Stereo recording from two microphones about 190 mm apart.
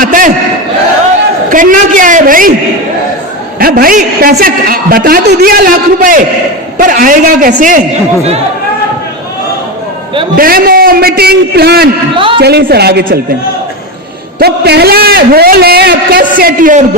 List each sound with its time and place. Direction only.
0.0 s battle cry: 45° right (ahead or behind)
1.5 s a woman's voice: 45° right (ahead or behind)
3.6 s a woman's voice: 50° right (ahead or behind)
10.3 s a woman's voice: 50° right (ahead or behind)
12.1 s a man's voice: 25° right (ahead or behind)
12.4 s a man's voice: 55° right (ahead or behind)
14.3 s a man's voice: 55° right (ahead or behind)